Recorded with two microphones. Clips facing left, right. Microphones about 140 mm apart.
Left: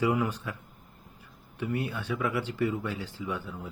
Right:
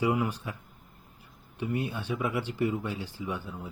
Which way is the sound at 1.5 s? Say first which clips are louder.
Even; 20° right (ahead or behind).